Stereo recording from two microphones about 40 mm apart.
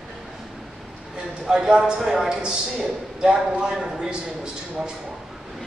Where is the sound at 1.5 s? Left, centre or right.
Centre.